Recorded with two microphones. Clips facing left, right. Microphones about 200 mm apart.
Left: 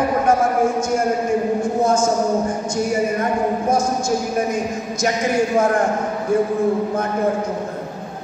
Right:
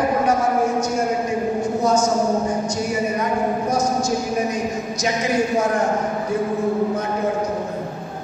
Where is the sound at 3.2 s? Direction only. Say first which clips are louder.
Left 1 dB; 50° left (ahead or behind).